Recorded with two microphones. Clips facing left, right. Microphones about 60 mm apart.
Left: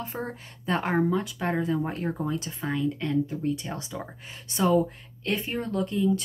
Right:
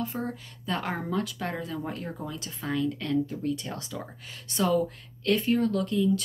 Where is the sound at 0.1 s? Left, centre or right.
Left.